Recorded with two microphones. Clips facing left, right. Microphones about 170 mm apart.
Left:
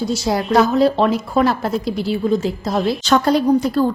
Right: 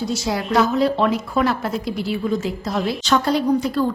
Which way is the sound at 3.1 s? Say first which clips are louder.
Left 3 dB; 45° left (ahead or behind).